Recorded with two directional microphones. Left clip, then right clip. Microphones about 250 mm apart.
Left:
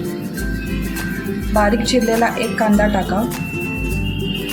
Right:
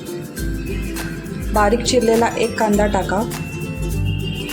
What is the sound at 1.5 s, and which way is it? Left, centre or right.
Speech, right.